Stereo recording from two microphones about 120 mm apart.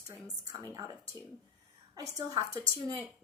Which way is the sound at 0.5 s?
35° right (ahead or behind).